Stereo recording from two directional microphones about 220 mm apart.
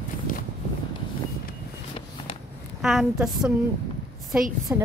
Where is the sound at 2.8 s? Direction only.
Centre (ahead or behind).